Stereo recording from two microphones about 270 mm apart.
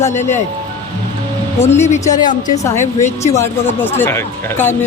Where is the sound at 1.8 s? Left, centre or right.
Left.